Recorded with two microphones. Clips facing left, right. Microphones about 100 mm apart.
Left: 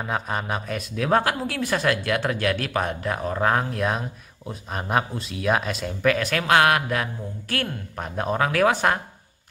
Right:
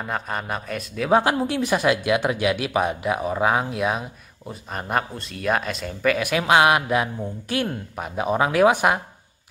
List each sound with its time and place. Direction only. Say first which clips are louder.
0.0 s a man's voice: left 1 dB; centre (ahead or behind)
1.1 s speech: right 4 dB; 20° right (ahead or behind); by 6.2 s centre (ahead or behind)
6.2 s speech: right 3 dB; 15° right (ahead or behind)
7.9 s speech: right 1 dB; 5° right (ahead or behind)
8.4 s speech: right 3 dB; 20° right (ahead or behind)